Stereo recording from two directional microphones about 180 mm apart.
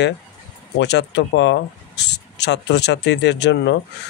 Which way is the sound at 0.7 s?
75° left (ahead or behind).